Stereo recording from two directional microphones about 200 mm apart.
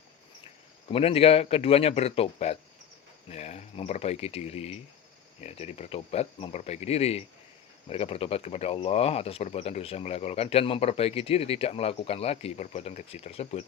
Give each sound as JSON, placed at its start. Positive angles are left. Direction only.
{"t": 0.9, "sound": "speech", "side_deg": 30}